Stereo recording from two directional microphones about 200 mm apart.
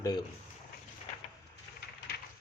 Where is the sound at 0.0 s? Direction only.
20° left (ahead or behind).